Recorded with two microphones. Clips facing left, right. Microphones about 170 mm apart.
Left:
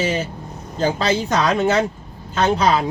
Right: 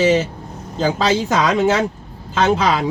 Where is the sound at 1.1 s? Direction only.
90° right.